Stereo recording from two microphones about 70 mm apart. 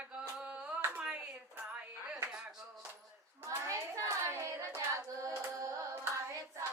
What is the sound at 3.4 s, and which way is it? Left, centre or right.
Hands, right.